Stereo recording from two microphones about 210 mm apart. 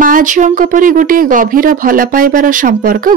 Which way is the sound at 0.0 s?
40° right (ahead or behind).